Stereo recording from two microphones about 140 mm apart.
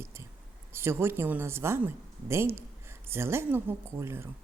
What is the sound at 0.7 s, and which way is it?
A woman's voice, 15° right (ahead or behind).